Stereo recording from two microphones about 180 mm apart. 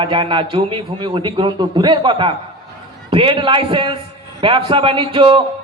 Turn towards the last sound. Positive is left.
turn(degrees=-25)  # may be behind; listen again after turning